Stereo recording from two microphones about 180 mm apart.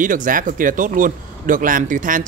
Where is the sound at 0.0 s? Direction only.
45° right (ahead or behind).